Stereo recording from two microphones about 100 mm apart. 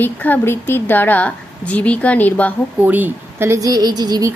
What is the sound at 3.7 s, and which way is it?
Speech, 45° right (ahead or behind).